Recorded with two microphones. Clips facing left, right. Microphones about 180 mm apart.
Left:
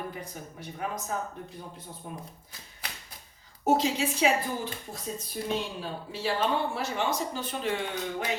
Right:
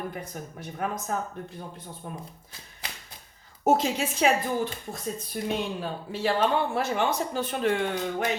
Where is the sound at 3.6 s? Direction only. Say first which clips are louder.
Right 2 dB; 50° right (ahead or behind).